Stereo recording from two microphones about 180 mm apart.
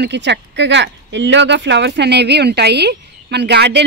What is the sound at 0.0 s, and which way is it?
Speech, 75° right (ahead or behind).